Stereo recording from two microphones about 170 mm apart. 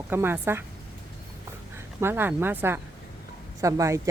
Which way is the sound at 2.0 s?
15° right (ahead or behind).